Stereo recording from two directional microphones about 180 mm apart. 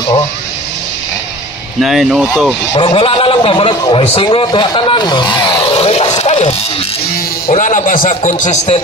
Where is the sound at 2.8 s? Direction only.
30° left (ahead or behind).